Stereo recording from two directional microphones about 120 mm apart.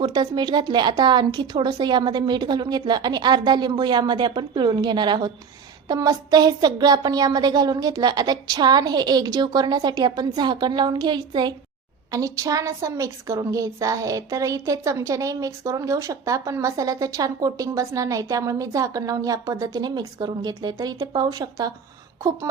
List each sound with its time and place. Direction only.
0.0 s a woman's voice: 35° right (ahead or behind)